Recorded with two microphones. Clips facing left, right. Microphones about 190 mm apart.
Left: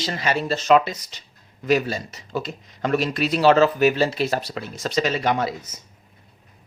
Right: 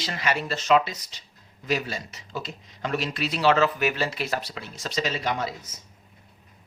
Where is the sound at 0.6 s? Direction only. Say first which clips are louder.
Left 4 dB; 50° left (ahead or behind); by 4.5 s 30° left (ahead or behind).